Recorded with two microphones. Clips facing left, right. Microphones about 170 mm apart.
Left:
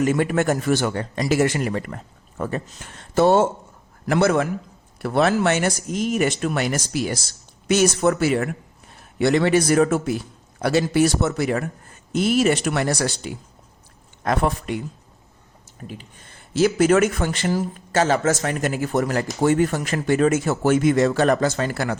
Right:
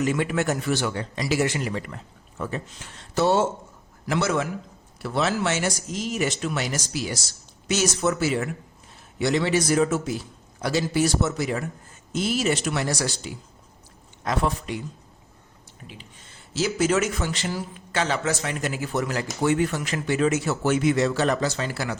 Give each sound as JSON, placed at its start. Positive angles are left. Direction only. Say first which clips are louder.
{"t": 0.0, "sound": "speech", "louder": "left 4 dB", "side_deg": 45}
{"t": 15.8, "sound": "speech", "louder": "left 8 dB", "side_deg": 45}